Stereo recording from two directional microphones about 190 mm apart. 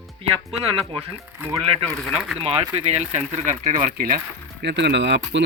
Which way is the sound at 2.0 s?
Centre (ahead or behind).